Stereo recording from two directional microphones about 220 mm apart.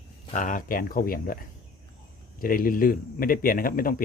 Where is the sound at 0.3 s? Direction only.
35° left (ahead or behind).